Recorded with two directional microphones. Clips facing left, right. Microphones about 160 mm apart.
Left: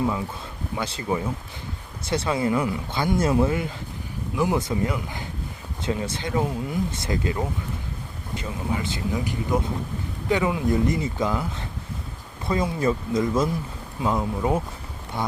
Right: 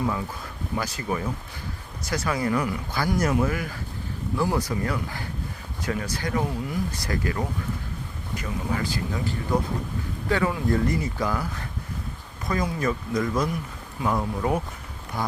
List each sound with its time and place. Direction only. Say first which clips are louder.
0.8 s speech: left 2 dB; 25° left (ahead or behind)